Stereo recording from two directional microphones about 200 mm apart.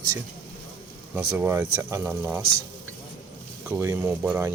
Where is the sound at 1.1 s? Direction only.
10° right (ahead or behind).